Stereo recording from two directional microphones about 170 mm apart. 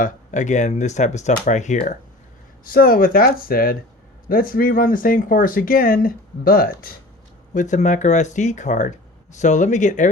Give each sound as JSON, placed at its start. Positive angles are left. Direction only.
{"t": 0.0, "sound": "speech", "side_deg": 45}
{"t": 2.6, "sound": "speech", "side_deg": 60}
{"t": 7.5, "sound": "speech", "side_deg": 45}